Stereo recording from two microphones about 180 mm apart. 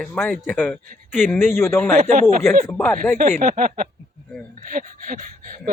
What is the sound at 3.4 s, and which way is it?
Speech, 50° right (ahead or behind).